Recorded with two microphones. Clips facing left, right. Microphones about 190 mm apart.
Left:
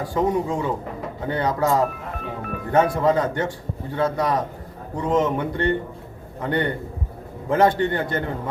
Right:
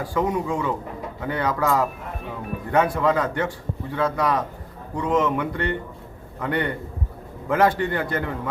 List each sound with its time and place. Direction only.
0.1 s a man's voice: 30° left (ahead or behind)